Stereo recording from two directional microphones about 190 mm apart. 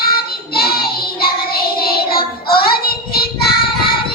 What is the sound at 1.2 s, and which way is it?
Music, 55° left (ahead or behind).